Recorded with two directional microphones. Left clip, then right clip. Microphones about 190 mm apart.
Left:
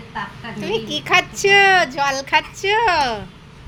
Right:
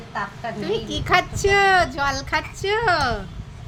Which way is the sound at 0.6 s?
10° right (ahead or behind).